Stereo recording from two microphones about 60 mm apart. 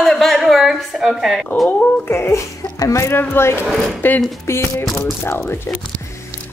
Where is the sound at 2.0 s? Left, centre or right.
Left.